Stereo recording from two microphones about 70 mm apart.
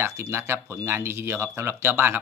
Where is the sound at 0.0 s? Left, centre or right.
Right.